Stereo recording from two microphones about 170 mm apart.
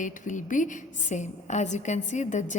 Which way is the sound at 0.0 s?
50° left (ahead or behind).